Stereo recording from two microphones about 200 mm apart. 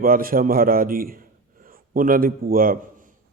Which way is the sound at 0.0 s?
45° right (ahead or behind).